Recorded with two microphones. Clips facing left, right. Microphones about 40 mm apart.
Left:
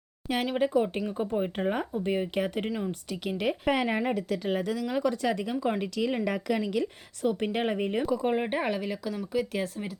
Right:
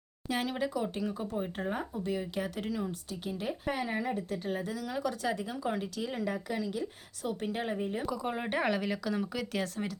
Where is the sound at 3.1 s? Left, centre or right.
Left.